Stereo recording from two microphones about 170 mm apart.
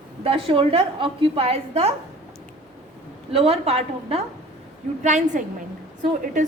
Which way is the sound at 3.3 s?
35° right (ahead or behind).